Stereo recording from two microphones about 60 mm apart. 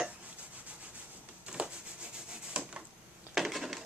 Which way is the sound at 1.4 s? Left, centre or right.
Centre.